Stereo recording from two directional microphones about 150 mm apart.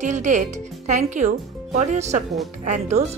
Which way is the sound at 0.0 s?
55° right (ahead or behind).